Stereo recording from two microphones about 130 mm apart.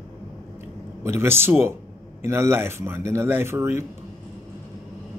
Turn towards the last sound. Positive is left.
turn(degrees=-20)  # may be behind; listen again after turning